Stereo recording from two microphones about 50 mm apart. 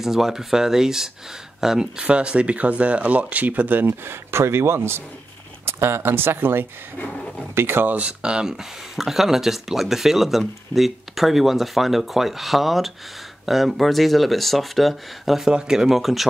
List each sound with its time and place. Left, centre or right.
0.0 s speech: centre
2.0 s speech: right
4.0 s speech: right
7.0 s speech: left
7.5 s speech: right
7.9 s speech: right; by 15.5 s centre
15.5 s speech: centre